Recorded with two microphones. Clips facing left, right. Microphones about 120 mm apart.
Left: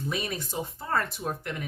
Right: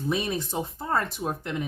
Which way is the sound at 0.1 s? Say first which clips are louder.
Right 7 dB; 25° right (ahead or behind).